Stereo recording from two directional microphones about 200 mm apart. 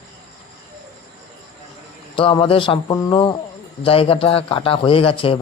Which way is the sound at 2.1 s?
25° left (ahead or behind).